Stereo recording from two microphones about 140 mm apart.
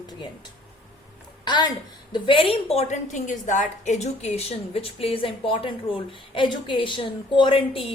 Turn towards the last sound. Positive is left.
turn(degrees=40)  # may be behind; listen again after turning